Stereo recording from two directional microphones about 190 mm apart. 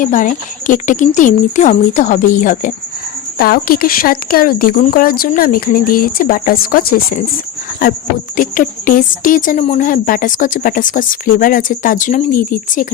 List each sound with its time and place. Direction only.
0.0 s a woman's voice: 45° left (ahead or behind)
8.4 s a woman's voice: 45° left (ahead or behind)